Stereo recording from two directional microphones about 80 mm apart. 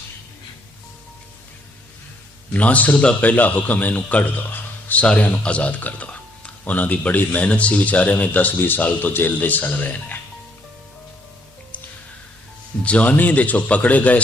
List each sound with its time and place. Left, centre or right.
2.5 s a man's voice: centre
12.8 s a man's voice: centre